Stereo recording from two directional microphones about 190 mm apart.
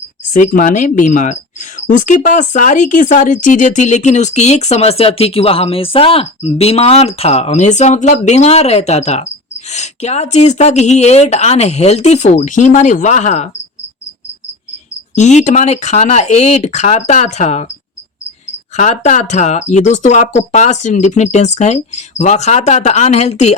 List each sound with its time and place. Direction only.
0.3 s speech: 45° left (ahead or behind)
15.1 s speech: 40° left (ahead or behind)
18.8 s speech: 40° left (ahead or behind)